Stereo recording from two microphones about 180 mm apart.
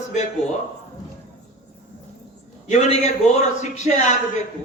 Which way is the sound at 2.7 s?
40° left (ahead or behind).